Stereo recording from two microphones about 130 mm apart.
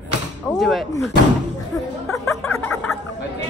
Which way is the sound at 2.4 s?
15° left (ahead or behind).